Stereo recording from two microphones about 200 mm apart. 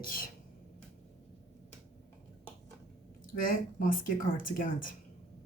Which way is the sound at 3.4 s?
45° left (ahead or behind).